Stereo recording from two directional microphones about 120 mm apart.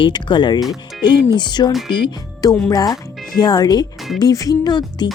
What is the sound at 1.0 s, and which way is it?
Speech, 40° left (ahead or behind).